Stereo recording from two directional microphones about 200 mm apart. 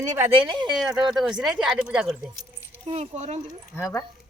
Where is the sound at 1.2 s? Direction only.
5° right (ahead or behind).